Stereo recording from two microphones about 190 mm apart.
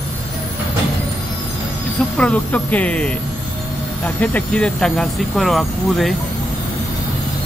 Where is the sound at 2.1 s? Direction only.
5° left (ahead or behind).